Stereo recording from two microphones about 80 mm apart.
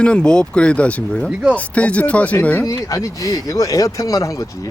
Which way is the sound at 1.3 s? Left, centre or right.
Centre.